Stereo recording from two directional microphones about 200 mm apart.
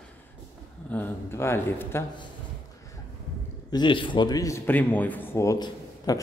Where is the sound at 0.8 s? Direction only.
10° left (ahead or behind).